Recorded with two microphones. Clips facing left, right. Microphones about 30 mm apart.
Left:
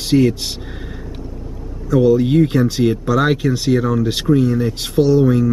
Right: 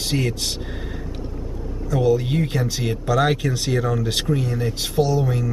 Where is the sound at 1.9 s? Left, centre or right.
Centre.